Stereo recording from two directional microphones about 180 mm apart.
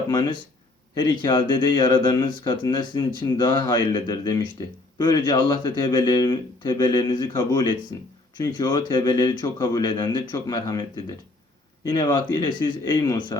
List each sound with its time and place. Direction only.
0.1 s speech: 20° left (ahead or behind)
11.9 s speech: 25° left (ahead or behind)